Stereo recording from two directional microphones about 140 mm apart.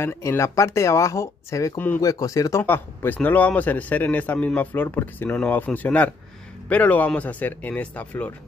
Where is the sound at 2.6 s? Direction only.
15° left (ahead or behind).